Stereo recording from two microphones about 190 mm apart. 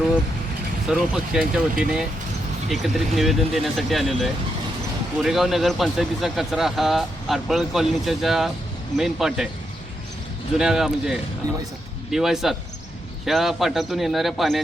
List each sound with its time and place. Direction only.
0.9 s speech: 5° right (ahead or behind)
10.6 s speech: centre (ahead or behind)
11.4 s a man's voice: 20° right (ahead or behind)
12.1 s speech: centre (ahead or behind)